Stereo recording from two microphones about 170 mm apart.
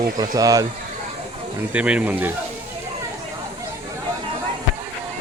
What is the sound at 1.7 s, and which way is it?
Speech, 10° right (ahead or behind).